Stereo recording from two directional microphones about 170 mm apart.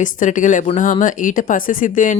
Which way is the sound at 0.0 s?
50° left (ahead or behind).